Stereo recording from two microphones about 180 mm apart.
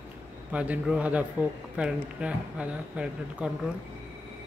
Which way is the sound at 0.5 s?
5° right (ahead or behind).